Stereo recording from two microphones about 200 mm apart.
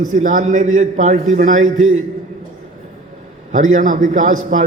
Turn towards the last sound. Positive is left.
turn(degrees=-40)  # may be behind; listen again after turning